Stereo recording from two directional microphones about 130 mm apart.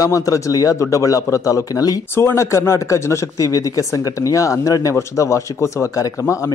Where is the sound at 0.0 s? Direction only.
25° left (ahead or behind).